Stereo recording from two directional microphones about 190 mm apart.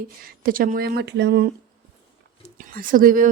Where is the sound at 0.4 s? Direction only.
50° right (ahead or behind).